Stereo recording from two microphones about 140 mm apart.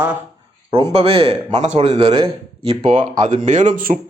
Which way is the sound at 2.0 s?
40° right (ahead or behind).